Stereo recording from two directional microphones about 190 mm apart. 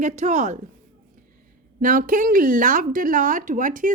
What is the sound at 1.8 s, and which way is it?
Speech, 45° right (ahead or behind).